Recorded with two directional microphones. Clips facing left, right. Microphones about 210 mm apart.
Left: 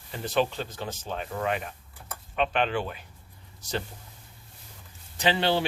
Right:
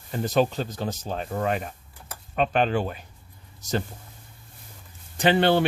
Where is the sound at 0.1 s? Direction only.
45° right (ahead or behind).